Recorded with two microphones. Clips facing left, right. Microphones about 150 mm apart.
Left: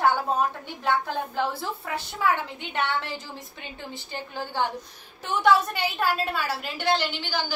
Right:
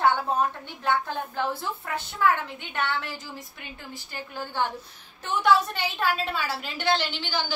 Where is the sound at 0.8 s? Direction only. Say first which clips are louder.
Left 1 dB; 15° left (ahead or behind).